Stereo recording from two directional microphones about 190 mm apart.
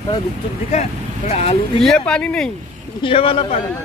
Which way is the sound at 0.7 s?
35° left (ahead or behind).